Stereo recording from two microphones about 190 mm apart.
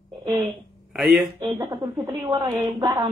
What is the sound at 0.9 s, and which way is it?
Speech, centre (ahead or behind).